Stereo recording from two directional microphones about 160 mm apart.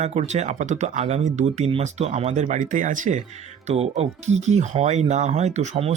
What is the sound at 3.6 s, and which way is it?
Speech, 40° right (ahead or behind).